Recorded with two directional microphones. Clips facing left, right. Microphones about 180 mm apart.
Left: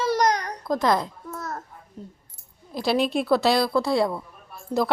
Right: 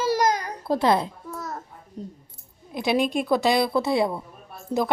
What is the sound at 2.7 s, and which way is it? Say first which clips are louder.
A woman's voice: even; 15° right (ahead or behind).